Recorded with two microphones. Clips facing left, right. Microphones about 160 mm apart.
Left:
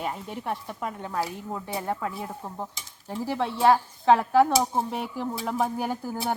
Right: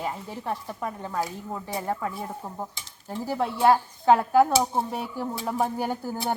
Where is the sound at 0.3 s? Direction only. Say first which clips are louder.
Even; 20° left (ahead or behind).